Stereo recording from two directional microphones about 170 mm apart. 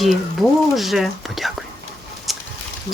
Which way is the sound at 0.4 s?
Centre (ahead or behind).